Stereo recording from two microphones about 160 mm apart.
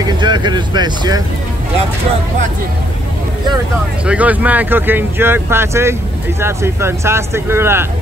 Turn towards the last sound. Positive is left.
turn(degrees=-15)  # may be behind; listen again after turning